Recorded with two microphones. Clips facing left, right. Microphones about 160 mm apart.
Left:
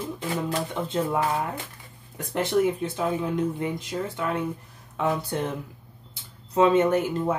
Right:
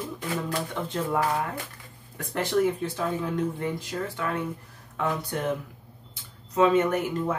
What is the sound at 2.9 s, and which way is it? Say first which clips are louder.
Speech: left 2 dB; 20° left (ahead or behind).